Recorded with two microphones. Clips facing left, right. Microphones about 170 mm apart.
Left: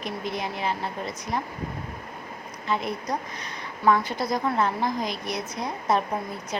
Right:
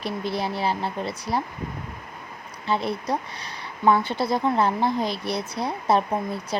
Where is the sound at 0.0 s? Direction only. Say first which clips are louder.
Right 3 dB; 35° right (ahead or behind).